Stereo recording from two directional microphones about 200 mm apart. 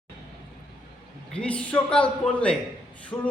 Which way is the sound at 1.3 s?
5° left (ahead or behind).